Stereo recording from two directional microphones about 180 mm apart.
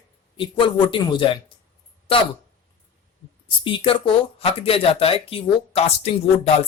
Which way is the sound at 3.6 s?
30° left (ahead or behind).